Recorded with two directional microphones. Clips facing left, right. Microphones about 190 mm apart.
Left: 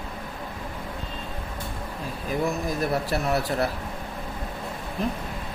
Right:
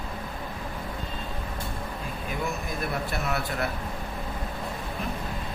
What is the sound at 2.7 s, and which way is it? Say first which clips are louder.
Speech: left 5 dB; 35° left (ahead or behind).